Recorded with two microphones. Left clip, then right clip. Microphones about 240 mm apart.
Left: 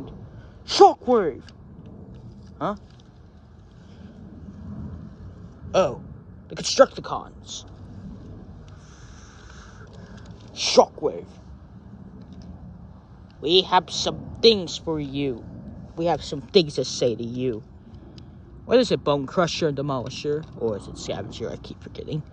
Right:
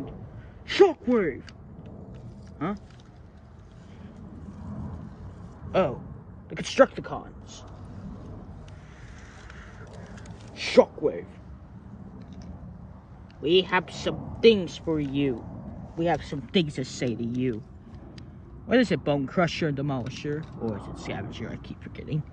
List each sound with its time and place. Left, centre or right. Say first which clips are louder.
0.7 s speech: left 6 dB; left
5.7 s speech: left 4 dB; centre
10.0 s a sound: even; centre
12.2 s vehicle: even; left
13.4 s speech: left 4 dB; left
18.7 s speech: left 4 dB; centre